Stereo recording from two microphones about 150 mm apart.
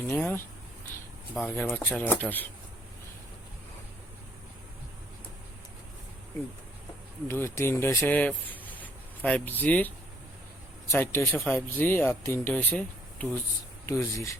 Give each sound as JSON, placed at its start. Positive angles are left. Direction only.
{"t": 0.1, "sound": "speech", "side_deg": 15}
{"t": 7.3, "sound": "speech", "side_deg": 15}
{"t": 10.9, "sound": "speech", "side_deg": 15}